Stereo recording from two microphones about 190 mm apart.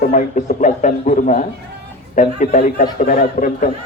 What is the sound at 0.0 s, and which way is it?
A man's voice, 40° left (ahead or behind).